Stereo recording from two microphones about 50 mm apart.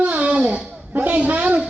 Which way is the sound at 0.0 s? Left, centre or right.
Right.